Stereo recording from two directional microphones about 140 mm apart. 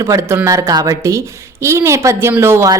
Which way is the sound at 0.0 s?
25° right (ahead or behind).